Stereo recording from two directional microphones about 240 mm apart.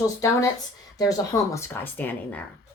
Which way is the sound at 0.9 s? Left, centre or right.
Centre.